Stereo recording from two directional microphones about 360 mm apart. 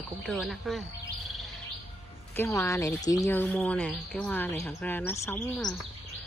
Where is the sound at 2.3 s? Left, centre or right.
Centre.